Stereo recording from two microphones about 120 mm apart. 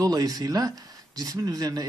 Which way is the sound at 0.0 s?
35° right (ahead or behind).